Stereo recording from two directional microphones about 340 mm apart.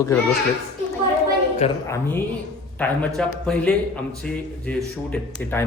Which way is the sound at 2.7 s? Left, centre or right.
Centre.